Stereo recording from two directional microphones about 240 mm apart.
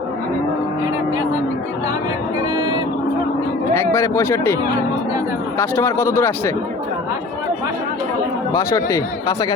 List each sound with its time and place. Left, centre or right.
2.6 s vehicle: centre
3.8 s speech: centre
5.5 s speech: centre
8.5 s speech: centre